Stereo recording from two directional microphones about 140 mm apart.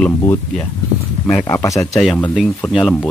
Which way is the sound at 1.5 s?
20° left (ahead or behind).